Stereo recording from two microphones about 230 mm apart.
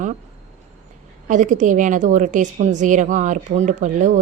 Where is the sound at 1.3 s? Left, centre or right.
Right.